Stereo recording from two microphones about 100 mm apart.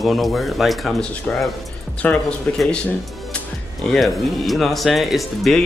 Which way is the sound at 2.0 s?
15° left (ahead or behind).